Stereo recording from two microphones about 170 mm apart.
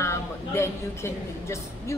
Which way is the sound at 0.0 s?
15° left (ahead or behind).